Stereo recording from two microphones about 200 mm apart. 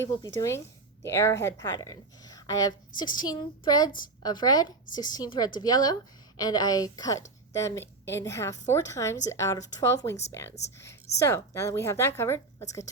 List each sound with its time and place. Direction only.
0.3 s a woman's voice: 15° left (ahead or behind)